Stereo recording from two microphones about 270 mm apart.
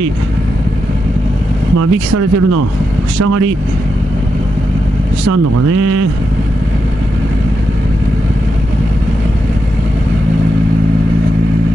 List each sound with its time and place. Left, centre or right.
1.8 s speech: right